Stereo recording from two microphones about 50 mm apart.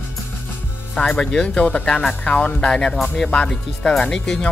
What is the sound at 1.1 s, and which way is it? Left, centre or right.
Speech, centre.